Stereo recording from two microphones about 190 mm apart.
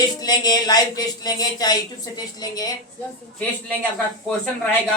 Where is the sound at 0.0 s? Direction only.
20° left (ahead or behind).